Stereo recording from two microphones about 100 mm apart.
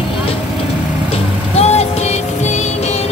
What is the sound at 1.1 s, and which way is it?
Vehicle, 90° left.